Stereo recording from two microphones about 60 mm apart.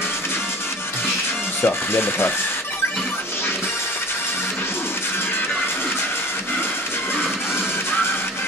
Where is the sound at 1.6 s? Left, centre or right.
Left.